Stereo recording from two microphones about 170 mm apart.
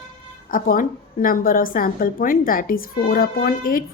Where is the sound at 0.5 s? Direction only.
55° left (ahead or behind).